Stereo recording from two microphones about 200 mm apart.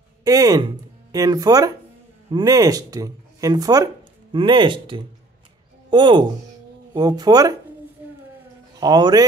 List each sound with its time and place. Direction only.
0.2 s speech: 15° right (ahead or behind)
8.7 s a man's voice: 20° right (ahead or behind)